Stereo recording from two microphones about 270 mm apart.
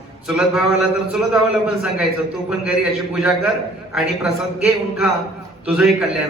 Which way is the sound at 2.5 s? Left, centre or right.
Centre.